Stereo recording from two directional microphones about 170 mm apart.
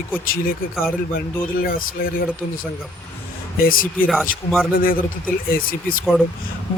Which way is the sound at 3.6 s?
55° left (ahead or behind).